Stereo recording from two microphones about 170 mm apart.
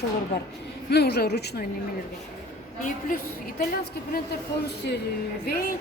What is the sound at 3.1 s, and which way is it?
Speech, 55° left (ahead or behind).